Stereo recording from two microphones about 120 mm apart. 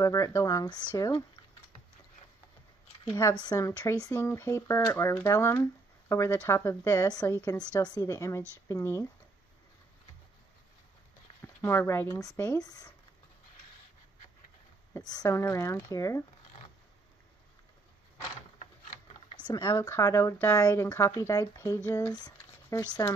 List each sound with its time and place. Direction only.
0.0 s speech: 25° left (ahead or behind)
3.1 s speech: 25° left (ahead or behind)
11.6 s speech: 20° left (ahead or behind)
12.5 s speech: 30° left (ahead or behind)
15.0 s speech: 35° left (ahead or behind)
19.4 s speech: 35° left (ahead or behind)